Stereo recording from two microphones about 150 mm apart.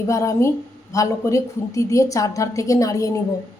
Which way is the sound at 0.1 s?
20° left (ahead or behind).